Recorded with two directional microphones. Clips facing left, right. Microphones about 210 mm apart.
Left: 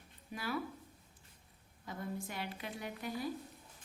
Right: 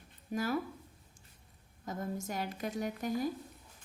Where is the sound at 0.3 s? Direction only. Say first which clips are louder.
Right 6 dB; 45° right (ahead or behind).